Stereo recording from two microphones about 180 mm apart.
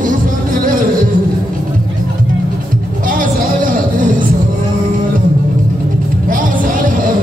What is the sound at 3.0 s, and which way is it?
Music, 50° right (ahead or behind).